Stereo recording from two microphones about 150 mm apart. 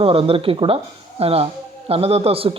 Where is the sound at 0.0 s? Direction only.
40° right (ahead or behind).